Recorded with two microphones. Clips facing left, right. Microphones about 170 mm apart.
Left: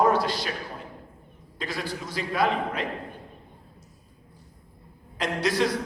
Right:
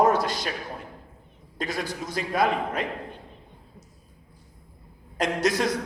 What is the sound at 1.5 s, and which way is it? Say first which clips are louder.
A man's voice: right 2 dB; 45° right (ahead or behind).